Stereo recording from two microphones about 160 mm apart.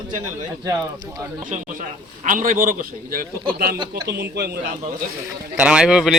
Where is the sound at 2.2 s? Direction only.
55° right (ahead or behind).